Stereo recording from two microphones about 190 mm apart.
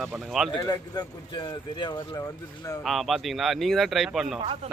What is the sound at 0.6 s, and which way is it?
Speech, 20° left (ahead or behind).